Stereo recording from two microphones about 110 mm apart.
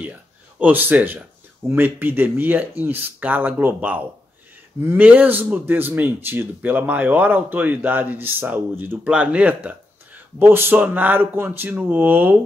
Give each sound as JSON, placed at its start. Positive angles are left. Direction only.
{"t": 0.0, "sound": "speech", "side_deg": -15}